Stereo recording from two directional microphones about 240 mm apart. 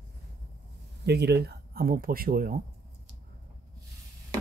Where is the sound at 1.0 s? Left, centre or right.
Right.